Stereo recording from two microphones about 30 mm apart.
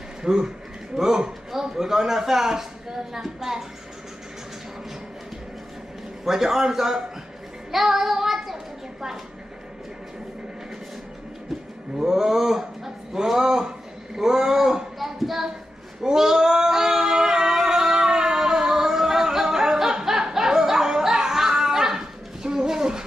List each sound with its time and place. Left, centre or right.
0.2 s a man's voice: right
6.2 s a man's voice: centre
7.7 s child singing: centre
12.0 s a man's voice: centre
15.0 s a sound: centre
16.0 s singing: centre
22.7 s a sound: right